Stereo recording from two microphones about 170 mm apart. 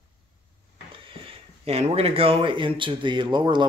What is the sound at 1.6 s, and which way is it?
Speech, 35° right (ahead or behind).